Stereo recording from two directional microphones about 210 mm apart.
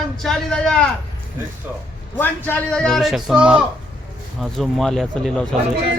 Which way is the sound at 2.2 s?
10° left (ahead or behind).